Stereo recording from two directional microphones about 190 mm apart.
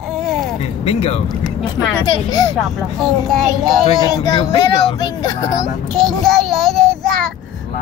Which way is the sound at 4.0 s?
20° left (ahead or behind).